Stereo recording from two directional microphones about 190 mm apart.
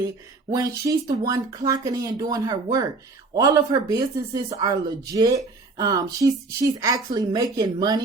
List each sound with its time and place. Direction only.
0.5 s speech: 20° right (ahead or behind)